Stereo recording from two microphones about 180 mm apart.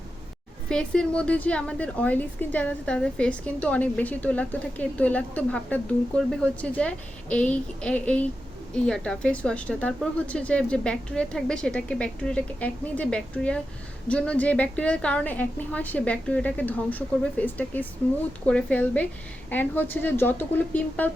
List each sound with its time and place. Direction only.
0.7 s a woman's voice: 5° left (ahead or behind)